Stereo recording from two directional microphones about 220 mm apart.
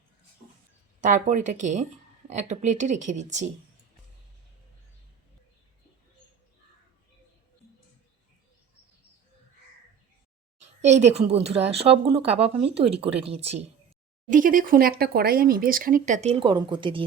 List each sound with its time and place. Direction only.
1.0 s speech: 35° right (ahead or behind)
10.8 s a woman's voice: 30° right (ahead or behind)